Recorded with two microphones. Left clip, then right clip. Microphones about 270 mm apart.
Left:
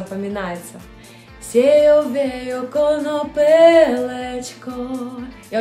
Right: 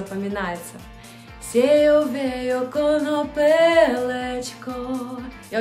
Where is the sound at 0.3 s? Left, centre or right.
Centre.